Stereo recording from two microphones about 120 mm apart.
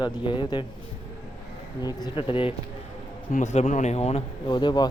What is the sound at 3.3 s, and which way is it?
Speech, 80° left.